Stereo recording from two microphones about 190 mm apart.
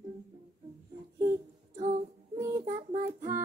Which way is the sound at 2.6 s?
40° right (ahead or behind).